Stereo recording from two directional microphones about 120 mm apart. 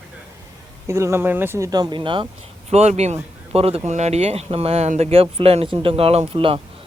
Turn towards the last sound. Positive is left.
turn(degrees=-50)  # may be behind; listen again after turning